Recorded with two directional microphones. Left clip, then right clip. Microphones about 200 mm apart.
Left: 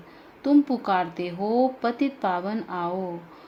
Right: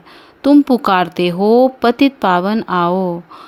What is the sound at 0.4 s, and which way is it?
A woman's voice, 50° right (ahead or behind).